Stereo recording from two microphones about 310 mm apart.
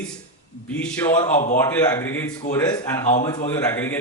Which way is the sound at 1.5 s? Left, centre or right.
Centre.